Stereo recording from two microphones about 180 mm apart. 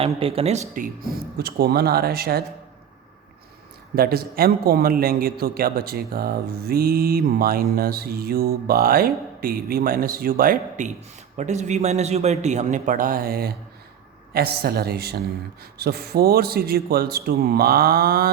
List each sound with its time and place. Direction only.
0.0 s a man's voice: 30° right (ahead or behind)
0.7 s a man's voice: 50° right (ahead or behind)
3.9 s a man's voice: 55° right (ahead or behind)